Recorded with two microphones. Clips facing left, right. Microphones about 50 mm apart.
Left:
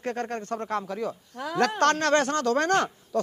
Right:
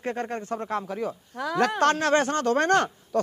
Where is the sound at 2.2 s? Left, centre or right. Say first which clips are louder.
Right 1 dB; right.